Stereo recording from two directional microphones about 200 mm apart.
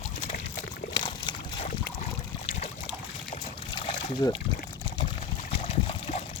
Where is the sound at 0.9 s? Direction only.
25° left (ahead or behind).